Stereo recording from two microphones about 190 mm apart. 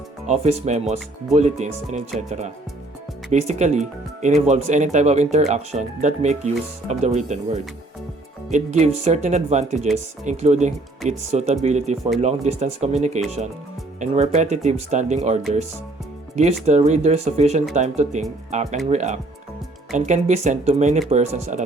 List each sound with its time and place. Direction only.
0.3 s speech: 35° right (ahead or behind)
3.4 s speech: 35° right (ahead or behind)